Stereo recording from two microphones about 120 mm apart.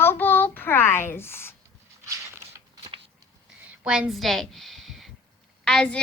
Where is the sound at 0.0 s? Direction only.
15° left (ahead or behind).